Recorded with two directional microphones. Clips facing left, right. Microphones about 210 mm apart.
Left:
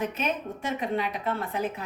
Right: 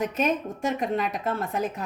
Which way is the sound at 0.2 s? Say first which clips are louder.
Right 5 dB; 45° right (ahead or behind).